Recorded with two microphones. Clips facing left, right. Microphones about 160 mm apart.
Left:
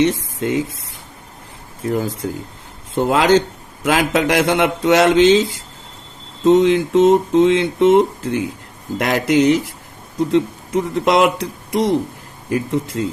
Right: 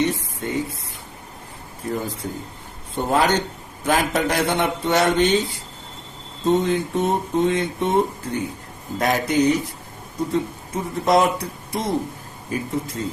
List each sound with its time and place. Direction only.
0.0 s speech: 90° left
2.0 s a sound: 90° left
10.2 s speech: 90° left